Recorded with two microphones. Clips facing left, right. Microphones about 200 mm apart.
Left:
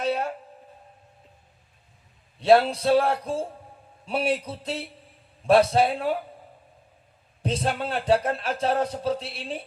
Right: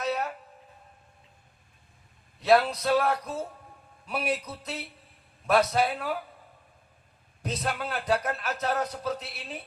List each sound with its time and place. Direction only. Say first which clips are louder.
0.0 s a sound: left 4 dB; 30° left (ahead or behind)
2.4 s speech: left 4 dB; 30° left (ahead or behind)
7.4 s speech: left 5 dB; 30° left (ahead or behind)